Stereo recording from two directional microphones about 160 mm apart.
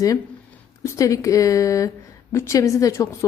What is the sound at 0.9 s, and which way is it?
A woman's voice, 20° left (ahead or behind).